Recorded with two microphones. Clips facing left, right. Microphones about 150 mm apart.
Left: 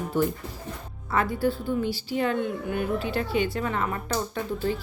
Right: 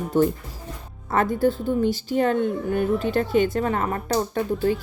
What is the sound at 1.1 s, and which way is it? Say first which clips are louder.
A woman's voice: right 4 dB; 45° right (ahead or behind).